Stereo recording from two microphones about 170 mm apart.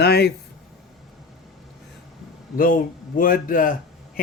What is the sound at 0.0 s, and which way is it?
Speech, 70° left (ahead or behind).